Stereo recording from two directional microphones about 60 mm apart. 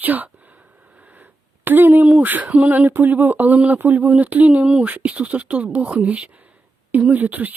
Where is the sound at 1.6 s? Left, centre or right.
Right.